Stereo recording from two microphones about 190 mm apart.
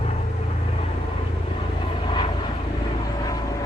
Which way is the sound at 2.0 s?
25° left (ahead or behind).